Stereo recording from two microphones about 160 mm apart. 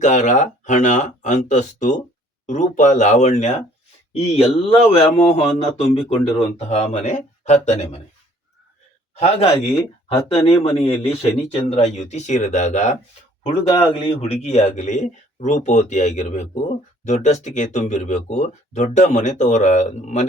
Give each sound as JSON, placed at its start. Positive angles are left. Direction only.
{"t": 0.0, "sound": "speech", "side_deg": 50}
{"t": 9.1, "sound": "speech", "side_deg": 40}
{"t": 13.4, "sound": "speech", "side_deg": 35}